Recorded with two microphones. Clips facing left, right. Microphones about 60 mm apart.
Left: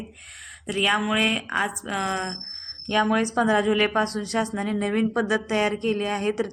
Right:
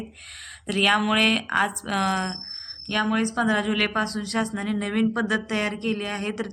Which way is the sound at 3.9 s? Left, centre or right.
Centre.